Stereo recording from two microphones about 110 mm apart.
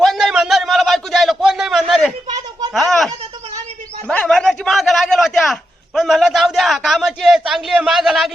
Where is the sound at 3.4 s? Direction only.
75° right (ahead or behind).